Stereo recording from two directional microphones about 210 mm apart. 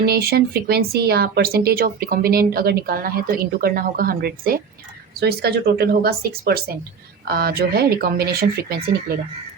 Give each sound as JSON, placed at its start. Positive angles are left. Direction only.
{"t": 0.0, "sound": "speech", "side_deg": -50}